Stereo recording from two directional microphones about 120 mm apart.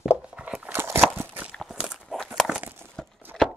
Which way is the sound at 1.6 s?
Centre (ahead or behind).